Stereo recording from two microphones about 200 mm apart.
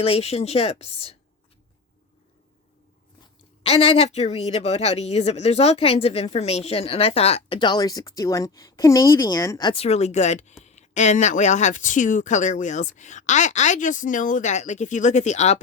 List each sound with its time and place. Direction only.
0.0 s speech: 30° left (ahead or behind)
3.6 s speech: 30° left (ahead or behind)